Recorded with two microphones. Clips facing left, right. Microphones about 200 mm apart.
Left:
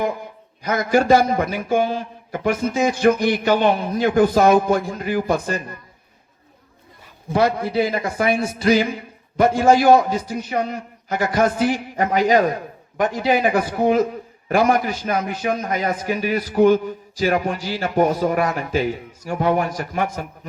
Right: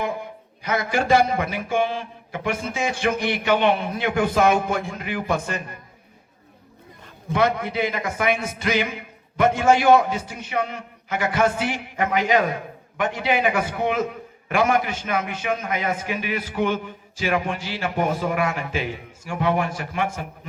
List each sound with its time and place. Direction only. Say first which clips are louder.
0.6 s a man's voice: left 5 dB; 40° left (ahead or behind)
7.3 s a man's voice: left 3 dB; 35° left (ahead or behind)